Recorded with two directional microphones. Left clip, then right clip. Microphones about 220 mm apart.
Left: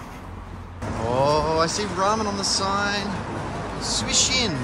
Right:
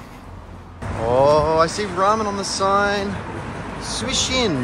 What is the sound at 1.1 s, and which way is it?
Speech, 10° left (ahead or behind).